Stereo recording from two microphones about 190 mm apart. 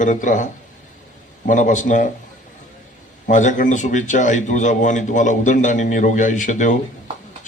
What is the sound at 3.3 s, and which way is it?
A man's voice, 40° left (ahead or behind).